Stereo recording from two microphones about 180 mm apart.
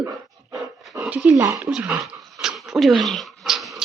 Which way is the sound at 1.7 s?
5° right (ahead or behind).